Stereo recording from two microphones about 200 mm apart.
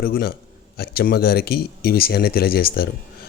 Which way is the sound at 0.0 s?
50° left (ahead or behind).